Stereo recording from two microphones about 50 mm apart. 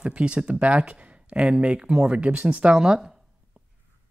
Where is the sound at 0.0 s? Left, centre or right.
Right.